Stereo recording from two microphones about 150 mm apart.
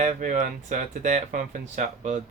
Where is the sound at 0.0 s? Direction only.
55° right (ahead or behind).